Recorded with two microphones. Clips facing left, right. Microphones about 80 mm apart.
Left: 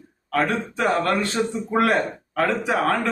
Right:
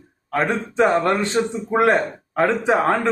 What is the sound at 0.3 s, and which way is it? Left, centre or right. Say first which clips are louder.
A man's voice: right 3 dB; right.